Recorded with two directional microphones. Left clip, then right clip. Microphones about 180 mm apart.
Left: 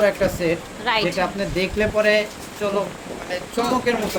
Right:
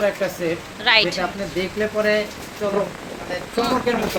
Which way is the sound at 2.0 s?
40° left (ahead or behind).